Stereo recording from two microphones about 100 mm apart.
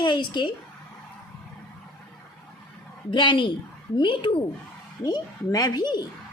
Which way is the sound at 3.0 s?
55° left (ahead or behind).